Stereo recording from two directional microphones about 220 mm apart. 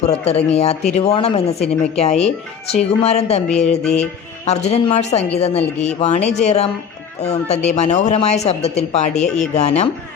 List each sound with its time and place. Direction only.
0.0 s speech: 30° left (ahead or behind)
4.4 s speech: 30° left (ahead or behind)